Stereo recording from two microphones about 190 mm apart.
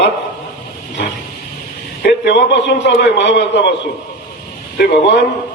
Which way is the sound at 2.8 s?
70° left (ahead or behind).